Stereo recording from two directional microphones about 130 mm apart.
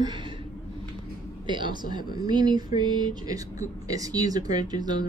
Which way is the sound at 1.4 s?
35° right (ahead or behind).